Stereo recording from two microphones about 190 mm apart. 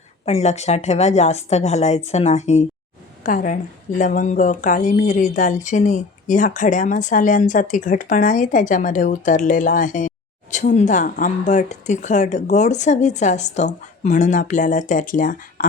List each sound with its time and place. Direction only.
0.3 s a woman's voice: 35° left (ahead or behind)